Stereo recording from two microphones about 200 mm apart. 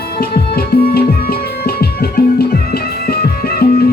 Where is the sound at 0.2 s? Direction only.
50° left (ahead or behind).